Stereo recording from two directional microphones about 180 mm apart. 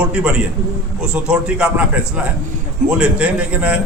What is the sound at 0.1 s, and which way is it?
A man's voice, 5° right (ahead or behind).